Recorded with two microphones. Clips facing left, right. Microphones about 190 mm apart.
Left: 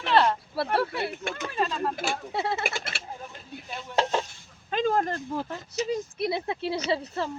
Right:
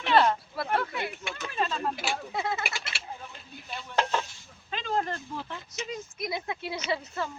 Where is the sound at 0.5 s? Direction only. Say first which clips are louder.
Left 3 dB; 30° left (ahead or behind).